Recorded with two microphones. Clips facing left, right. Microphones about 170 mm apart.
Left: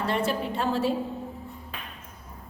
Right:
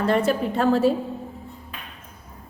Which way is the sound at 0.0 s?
45° right (ahead or behind).